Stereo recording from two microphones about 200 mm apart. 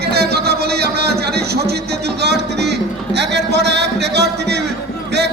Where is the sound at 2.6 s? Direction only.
60° right (ahead or behind).